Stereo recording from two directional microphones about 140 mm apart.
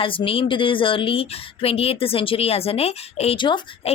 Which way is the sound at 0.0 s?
40° left (ahead or behind).